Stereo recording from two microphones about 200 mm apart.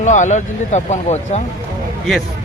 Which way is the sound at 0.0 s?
35° left (ahead or behind).